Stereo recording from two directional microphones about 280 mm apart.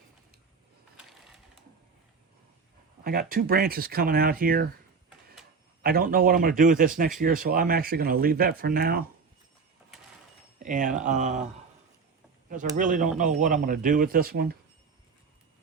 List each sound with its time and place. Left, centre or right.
0.9 s a sound: centre
3.0 s a man's voice: right
5.0 s printer: centre
5.8 s a man's voice: right
10.6 s speech: right
12.7 s speech: right